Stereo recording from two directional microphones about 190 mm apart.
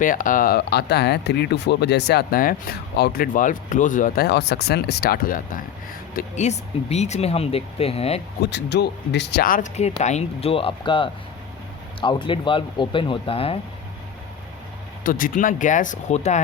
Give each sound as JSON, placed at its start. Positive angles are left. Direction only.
{"t": 0.0, "sound": "speech", "side_deg": 45}
{"t": 6.1, "sound": "speech", "side_deg": 40}
{"t": 8.4, "sound": "speech", "side_deg": 60}
{"t": 10.0, "sound": "speech", "side_deg": 35}
{"t": 15.0, "sound": "speech", "side_deg": 45}